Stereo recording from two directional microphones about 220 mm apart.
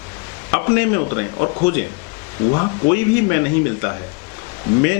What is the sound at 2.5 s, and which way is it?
Speech, 15° left (ahead or behind).